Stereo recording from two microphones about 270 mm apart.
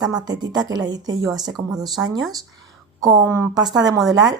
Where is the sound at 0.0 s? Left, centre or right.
Centre.